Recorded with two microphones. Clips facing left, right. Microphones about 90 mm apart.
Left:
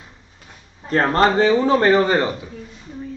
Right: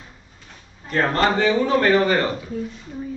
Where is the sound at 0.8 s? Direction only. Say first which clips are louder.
Left 3 dB; 35° left (ahead or behind).